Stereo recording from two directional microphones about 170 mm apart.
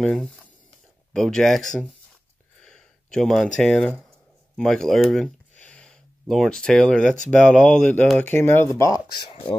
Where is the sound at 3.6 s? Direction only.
5° left (ahead or behind).